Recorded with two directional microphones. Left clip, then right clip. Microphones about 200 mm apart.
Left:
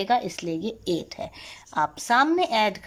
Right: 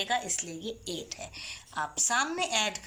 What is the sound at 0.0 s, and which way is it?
A woman's voice, 50° left (ahead or behind).